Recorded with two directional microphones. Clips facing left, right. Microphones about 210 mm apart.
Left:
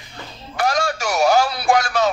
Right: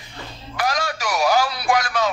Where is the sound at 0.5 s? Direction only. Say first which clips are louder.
Left 3 dB; 30° left (ahead or behind).